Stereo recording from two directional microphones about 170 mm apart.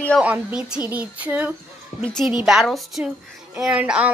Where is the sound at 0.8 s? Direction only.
10° right (ahead or behind).